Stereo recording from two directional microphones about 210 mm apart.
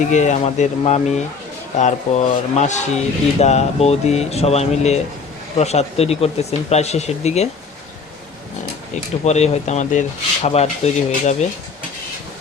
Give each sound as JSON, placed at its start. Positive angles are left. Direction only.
{"t": 0.1, "sound": "speech", "side_deg": 35}
{"t": 9.2, "sound": "speech", "side_deg": 30}